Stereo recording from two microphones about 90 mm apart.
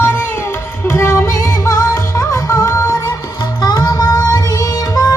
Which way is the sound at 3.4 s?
50° left (ahead or behind).